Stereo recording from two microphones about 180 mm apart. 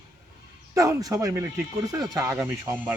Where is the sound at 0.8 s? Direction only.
20° right (ahead or behind).